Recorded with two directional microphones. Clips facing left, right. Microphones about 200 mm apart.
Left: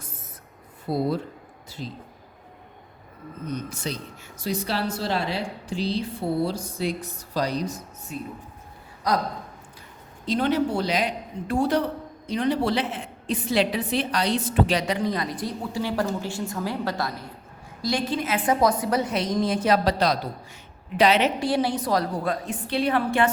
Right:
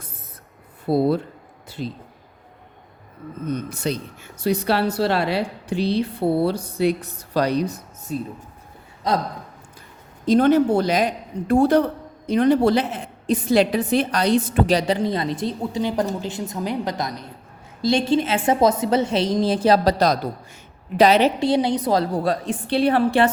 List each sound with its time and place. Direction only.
0.9 s speech: 60° right (ahead or behind)
3.4 s speech: 55° right (ahead or behind)
8.1 s a woman's voice: 35° right (ahead or behind)
9.0 s a woman's voice: 25° right (ahead or behind)
10.2 s a woman's voice: 45° right (ahead or behind)
14.8 s a woman's voice: 30° right (ahead or behind)
21.3 s a woman's voice: 20° right (ahead or behind)